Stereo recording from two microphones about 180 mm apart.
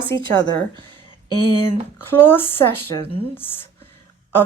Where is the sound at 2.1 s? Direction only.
10° left (ahead or behind).